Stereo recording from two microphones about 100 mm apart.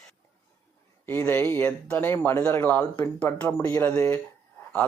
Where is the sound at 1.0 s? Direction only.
20° left (ahead or behind).